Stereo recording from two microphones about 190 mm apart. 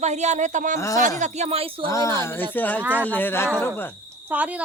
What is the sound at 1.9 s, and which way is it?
Speech, 15° left (ahead or behind).